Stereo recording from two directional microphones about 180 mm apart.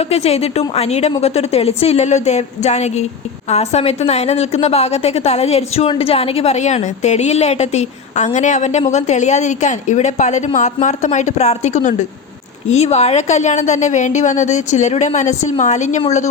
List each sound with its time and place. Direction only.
0.0 s a woman's voice: 35° left (ahead or behind)